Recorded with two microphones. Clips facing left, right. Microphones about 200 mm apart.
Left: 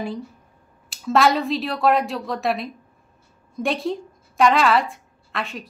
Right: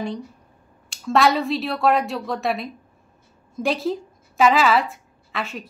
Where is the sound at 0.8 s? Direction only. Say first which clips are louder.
Even; centre (ahead or behind).